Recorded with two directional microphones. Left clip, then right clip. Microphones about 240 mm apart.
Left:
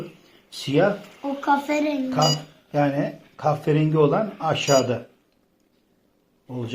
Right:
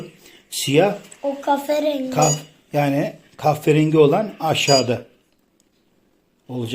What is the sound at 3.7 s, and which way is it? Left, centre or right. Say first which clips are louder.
Speech: right 5 dB; right.